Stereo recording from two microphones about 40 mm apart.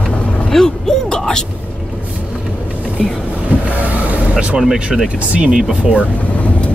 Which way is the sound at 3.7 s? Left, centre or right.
Right.